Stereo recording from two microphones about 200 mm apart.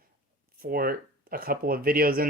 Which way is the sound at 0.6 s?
45° right (ahead or behind).